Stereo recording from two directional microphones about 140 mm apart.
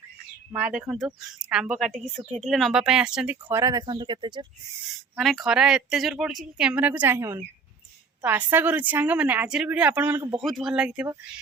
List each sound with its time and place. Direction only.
0.5 s a woman's voice: 5° right (ahead or behind)
3.5 s speech: 25° right (ahead or behind)
5.1 s a woman's voice: centre (ahead or behind)
10.4 s a woman's voice: centre (ahead or behind)